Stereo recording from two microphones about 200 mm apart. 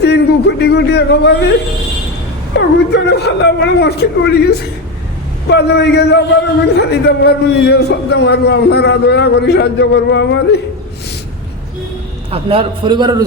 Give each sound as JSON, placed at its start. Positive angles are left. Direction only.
{"t": 0.0, "sound": "a sound", "side_deg": 55}
{"t": 2.6, "sound": "a man's voice", "side_deg": 55}
{"t": 5.5, "sound": "a man's voice", "side_deg": 60}
{"t": 12.3, "sound": "a man's voice", "side_deg": -25}